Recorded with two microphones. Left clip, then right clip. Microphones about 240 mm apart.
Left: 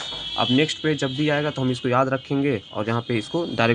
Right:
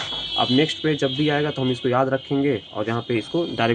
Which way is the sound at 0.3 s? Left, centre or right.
Left.